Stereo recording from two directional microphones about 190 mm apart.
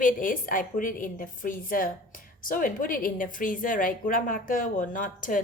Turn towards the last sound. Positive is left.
turn(degrees=45)  # may be behind; listen again after turning